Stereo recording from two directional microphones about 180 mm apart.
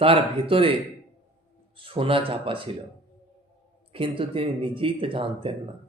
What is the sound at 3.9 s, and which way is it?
Speech, 30° right (ahead or behind).